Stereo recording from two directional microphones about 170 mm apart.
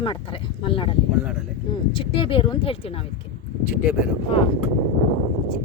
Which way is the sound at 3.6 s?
5° right (ahead or behind).